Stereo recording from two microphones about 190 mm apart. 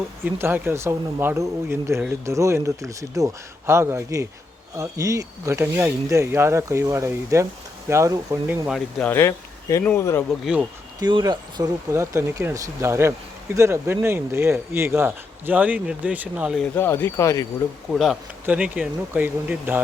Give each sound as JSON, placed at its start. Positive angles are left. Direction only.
{"t": 0.3, "sound": "speech", "side_deg": -10}
{"t": 8.6, "sound": "speech", "side_deg": 0}
{"t": 10.4, "sound": "speech", "side_deg": -5}
{"t": 11.0, "sound": "speech", "side_deg": -20}
{"t": 16.7, "sound": "speech", "side_deg": 10}
{"t": 17.9, "sound": "speech", "side_deg": 0}